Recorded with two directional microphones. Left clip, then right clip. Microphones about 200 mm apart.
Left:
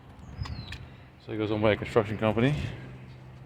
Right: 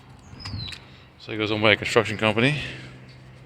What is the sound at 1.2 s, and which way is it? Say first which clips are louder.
A man's voice: right 5 dB; centre (ahead or behind).